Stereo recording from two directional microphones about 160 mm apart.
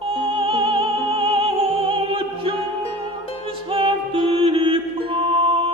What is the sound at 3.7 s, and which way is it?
Mantra, 35° right (ahead or behind).